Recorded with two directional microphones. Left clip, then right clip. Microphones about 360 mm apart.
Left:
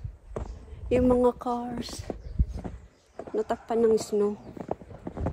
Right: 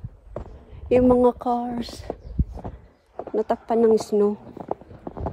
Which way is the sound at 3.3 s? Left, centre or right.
Right.